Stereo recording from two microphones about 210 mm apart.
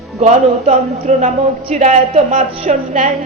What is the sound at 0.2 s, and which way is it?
Speech, 30° right (ahead or behind).